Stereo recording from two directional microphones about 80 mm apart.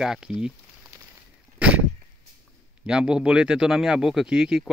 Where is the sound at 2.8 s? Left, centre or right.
Centre.